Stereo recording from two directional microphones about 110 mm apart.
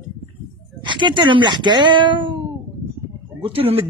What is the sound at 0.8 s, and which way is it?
Speech, 45° right (ahead or behind).